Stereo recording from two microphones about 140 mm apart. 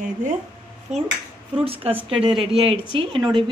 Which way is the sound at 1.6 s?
40° right (ahead or behind).